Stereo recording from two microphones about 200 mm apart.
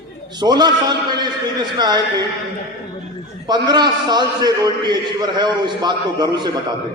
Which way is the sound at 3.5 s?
20° right (ahead or behind).